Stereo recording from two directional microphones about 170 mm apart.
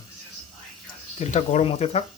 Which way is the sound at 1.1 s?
45° left (ahead or behind).